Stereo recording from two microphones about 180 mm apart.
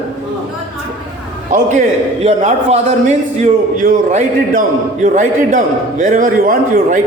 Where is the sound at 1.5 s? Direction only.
40° right (ahead or behind).